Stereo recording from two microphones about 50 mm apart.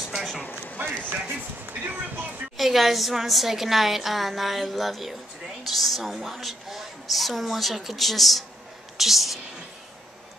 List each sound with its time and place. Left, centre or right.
0.1 s a sound: centre
1.1 s speech: right
2.5 s a woman's voice: centre